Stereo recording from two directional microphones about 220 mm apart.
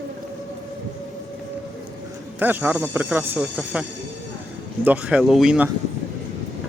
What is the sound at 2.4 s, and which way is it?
Speech, 10° right (ahead or behind).